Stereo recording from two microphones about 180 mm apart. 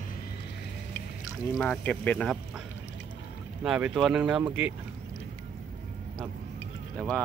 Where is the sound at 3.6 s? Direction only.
5° right (ahead or behind).